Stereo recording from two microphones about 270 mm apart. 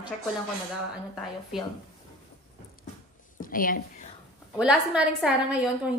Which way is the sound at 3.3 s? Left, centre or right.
Left.